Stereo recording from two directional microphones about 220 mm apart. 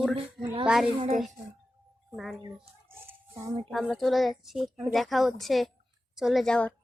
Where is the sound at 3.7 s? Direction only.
Centre (ahead or behind).